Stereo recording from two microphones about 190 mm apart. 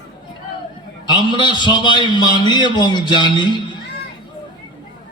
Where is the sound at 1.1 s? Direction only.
25° left (ahead or behind).